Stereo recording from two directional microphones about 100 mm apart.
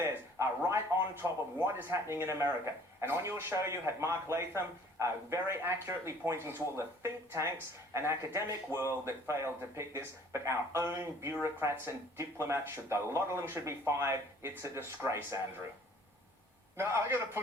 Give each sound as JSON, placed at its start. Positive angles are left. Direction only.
{"t": 0.0, "sound": "a sound", "side_deg": -25}
{"t": 1.2, "sound": "a man's voice", "side_deg": -25}
{"t": 16.7, "sound": "a man's voice", "side_deg": -25}